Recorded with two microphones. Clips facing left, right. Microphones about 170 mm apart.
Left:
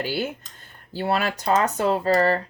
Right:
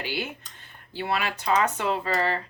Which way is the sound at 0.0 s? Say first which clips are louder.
Left 5 dB; 40° left (ahead or behind).